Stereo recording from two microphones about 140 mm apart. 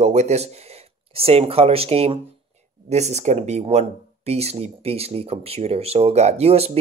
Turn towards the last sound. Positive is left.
turn(degrees=-50)  # may be behind; listen again after turning